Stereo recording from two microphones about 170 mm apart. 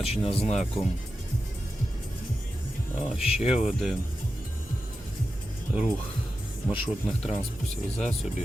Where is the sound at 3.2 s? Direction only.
35° left (ahead or behind).